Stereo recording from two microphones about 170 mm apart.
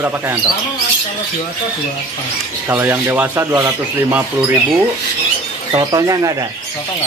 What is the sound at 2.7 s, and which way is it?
Speech, 15° right (ahead or behind).